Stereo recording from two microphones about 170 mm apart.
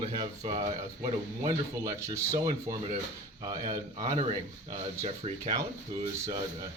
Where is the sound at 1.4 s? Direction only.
20° right (ahead or behind).